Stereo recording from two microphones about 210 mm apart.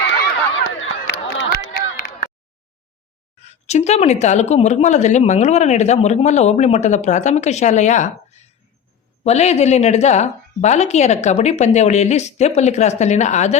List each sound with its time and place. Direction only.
0.1 s run: 55° left (ahead or behind)
1.3 s a sound: 45° left (ahead or behind)
3.4 s a woman's voice: 30° left (ahead or behind)